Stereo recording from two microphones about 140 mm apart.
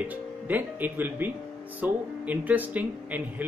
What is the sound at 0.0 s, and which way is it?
Speech, 10° right (ahead or behind).